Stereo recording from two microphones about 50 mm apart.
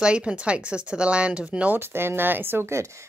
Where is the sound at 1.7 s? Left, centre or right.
Right.